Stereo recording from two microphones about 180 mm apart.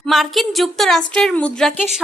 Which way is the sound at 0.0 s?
Centre (ahead or behind).